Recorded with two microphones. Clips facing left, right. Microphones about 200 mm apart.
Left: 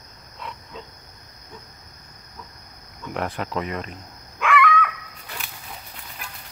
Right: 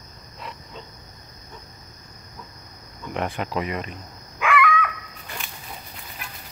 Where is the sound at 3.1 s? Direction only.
Centre (ahead or behind).